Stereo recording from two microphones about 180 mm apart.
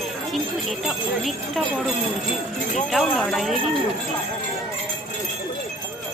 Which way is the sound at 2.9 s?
Centre (ahead or behind).